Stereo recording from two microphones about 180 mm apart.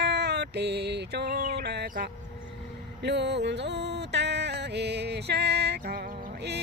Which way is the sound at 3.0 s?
70° right (ahead or behind).